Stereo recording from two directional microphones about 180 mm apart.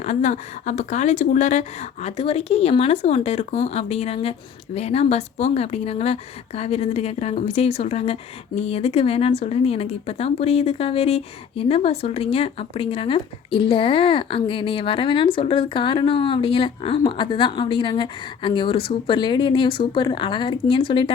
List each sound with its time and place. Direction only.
0.0 s a woman's voice: 40° left (ahead or behind)